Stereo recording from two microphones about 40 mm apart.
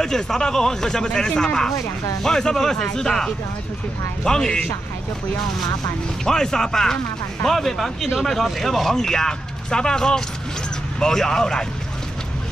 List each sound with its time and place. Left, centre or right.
0.0 s speech: centre
6.2 s speech: centre